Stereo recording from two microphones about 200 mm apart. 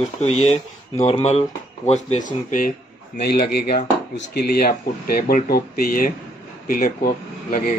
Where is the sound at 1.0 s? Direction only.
30° left (ahead or behind).